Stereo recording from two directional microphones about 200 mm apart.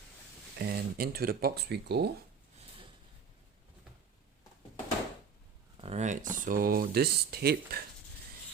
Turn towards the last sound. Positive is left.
turn(degrees=-50)  # may be behind; listen again after turning